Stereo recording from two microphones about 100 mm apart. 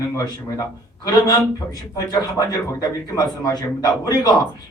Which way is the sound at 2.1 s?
45° left (ahead or behind).